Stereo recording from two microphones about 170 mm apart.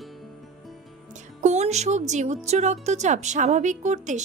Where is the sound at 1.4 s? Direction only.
40° right (ahead or behind).